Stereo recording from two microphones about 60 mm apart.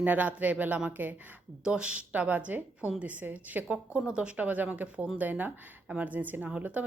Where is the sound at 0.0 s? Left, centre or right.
Right.